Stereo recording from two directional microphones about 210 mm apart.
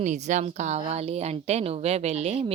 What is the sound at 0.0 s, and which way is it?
A woman's voice, 35° right (ahead or behind).